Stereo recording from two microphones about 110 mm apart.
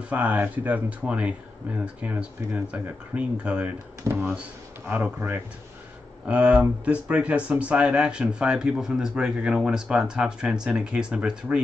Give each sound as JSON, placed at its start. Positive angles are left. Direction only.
{"t": 0.1, "sound": "speech", "side_deg": -15}
{"t": 4.1, "sound": "speech", "side_deg": -20}